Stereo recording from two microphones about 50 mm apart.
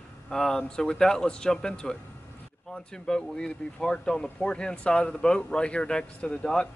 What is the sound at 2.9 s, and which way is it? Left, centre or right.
Speech, centre.